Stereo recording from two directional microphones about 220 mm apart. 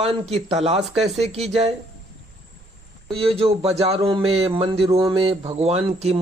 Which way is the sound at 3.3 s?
25° right (ahead or behind).